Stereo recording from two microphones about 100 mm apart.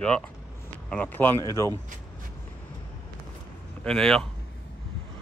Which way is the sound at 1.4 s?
30° left (ahead or behind).